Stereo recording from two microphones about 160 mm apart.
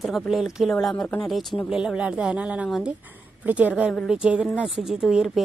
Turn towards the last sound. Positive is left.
turn(degrees=0)  # may be behind; listen again after turning